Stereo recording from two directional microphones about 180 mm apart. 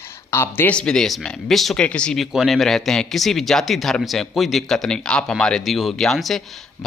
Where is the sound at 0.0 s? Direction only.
15° left (ahead or behind).